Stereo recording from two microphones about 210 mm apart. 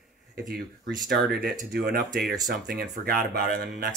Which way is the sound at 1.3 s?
45° right (ahead or behind).